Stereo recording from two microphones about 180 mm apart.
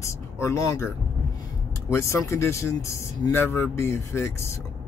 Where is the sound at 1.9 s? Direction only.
15° left (ahead or behind).